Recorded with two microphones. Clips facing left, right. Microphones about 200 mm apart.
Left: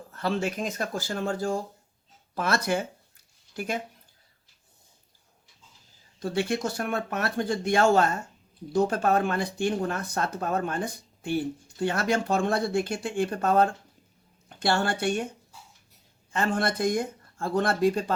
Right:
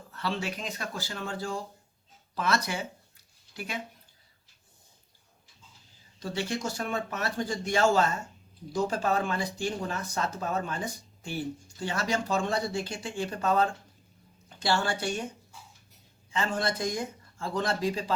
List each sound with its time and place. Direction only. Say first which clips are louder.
0.1 s speech: left 5 dB; 45° left (ahead or behind)
6.1 s speech: left 5 dB; 55° left (ahead or behind)
16.3 s speech: left 3 dB; 55° left (ahead or behind)